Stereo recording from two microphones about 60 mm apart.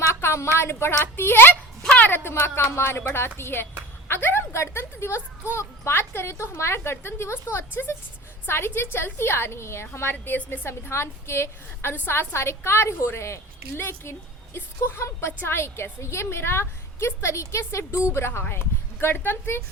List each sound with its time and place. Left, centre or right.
0.0 s a woman's voice: left
10.7 s a woman's voice: left